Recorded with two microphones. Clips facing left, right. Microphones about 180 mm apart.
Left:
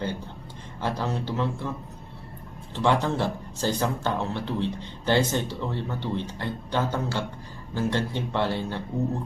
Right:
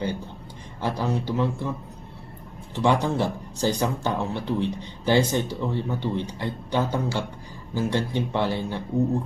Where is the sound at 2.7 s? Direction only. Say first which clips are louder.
Right 2 dB; 15° right (ahead or behind).